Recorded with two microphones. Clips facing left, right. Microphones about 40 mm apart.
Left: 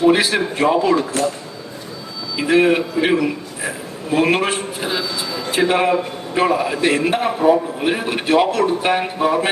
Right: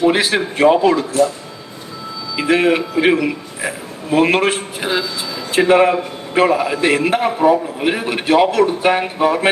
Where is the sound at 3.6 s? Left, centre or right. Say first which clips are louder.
Right 2 dB; right.